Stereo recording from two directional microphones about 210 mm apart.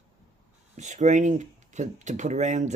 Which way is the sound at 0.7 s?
35° right (ahead or behind).